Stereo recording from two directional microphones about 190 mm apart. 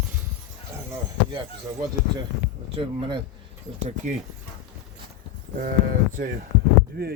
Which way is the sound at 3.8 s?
40° right (ahead or behind).